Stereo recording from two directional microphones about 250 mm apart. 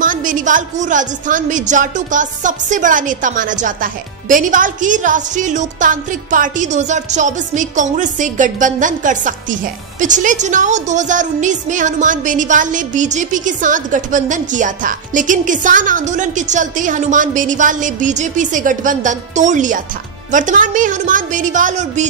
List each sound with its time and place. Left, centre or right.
0.0 s a woman's voice: right